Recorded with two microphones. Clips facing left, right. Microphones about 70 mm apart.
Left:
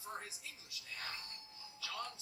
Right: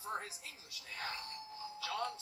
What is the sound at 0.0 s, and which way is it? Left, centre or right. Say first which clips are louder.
A man's voice: right 5 dB; right.